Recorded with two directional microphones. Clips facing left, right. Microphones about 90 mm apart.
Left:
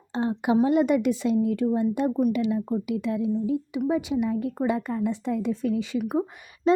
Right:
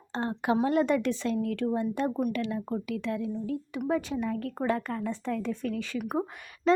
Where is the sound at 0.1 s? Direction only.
10° left (ahead or behind).